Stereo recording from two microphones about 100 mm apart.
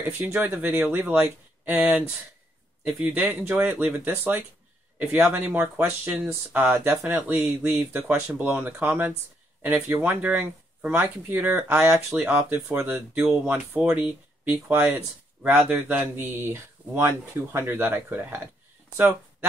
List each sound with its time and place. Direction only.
0.0 s speech: 20° right (ahead or behind)